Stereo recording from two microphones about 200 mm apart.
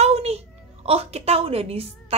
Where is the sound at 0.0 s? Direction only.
30° right (ahead or behind).